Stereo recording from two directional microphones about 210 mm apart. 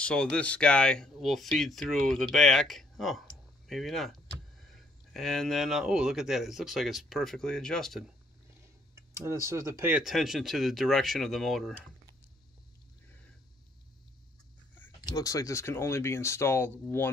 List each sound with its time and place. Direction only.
0.0 s speech: 5° left (ahead or behind)
9.1 s speech: 10° right (ahead or behind)
14.8 s speech: 15° left (ahead or behind)